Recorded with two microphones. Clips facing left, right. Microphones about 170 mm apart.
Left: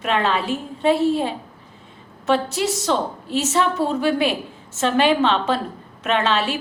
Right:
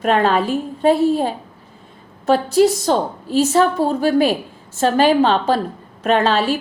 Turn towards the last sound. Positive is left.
turn(degrees=-35)  # may be behind; listen again after turning